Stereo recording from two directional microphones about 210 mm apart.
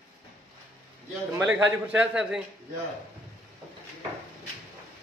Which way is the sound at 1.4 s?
5° right (ahead or behind).